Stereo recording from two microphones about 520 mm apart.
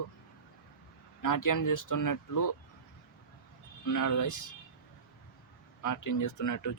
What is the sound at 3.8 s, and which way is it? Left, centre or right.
Speech, left.